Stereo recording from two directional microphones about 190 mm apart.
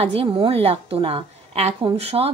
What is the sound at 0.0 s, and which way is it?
A woman's voice, 30° right (ahead or behind).